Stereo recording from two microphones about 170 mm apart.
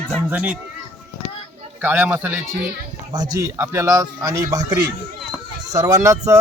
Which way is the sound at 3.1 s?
20° right (ahead or behind).